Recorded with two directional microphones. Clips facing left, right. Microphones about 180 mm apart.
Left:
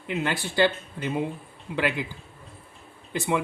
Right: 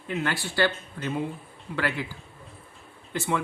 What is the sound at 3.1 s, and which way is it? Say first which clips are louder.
Speech: left 2 dB; 15° left (ahead or behind).